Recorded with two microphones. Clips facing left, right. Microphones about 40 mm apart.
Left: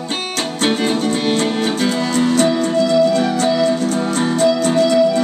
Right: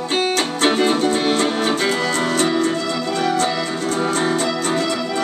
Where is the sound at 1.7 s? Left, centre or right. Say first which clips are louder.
Left 1 dB; centre.